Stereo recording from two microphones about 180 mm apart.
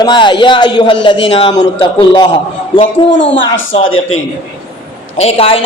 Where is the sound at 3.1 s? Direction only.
85° left.